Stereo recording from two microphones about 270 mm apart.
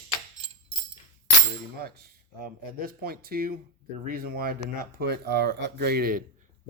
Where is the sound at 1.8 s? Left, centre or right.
Right.